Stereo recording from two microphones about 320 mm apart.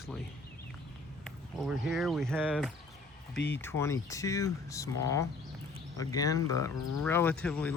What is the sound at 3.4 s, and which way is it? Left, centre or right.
Speech, left.